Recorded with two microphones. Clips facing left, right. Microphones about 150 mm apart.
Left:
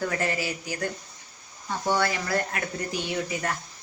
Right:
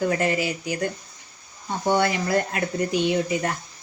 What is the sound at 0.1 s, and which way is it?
Speech, 20° right (ahead or behind).